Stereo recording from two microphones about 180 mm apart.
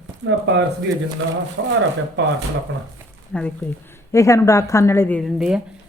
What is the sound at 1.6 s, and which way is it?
Speech, 90° right.